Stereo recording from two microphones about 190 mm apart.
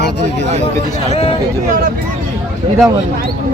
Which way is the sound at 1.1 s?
35° left (ahead or behind).